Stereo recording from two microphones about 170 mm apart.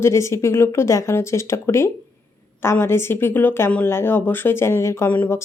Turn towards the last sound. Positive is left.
turn(degrees=10)  # may be behind; listen again after turning